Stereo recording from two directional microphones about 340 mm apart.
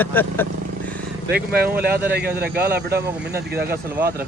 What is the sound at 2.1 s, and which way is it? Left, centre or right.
Speech, right.